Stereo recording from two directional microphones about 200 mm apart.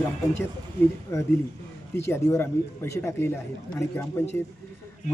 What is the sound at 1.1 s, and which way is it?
Speech, 15° left (ahead or behind).